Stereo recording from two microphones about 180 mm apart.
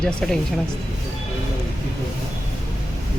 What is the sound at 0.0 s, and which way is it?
Speech, 5° left (ahead or behind).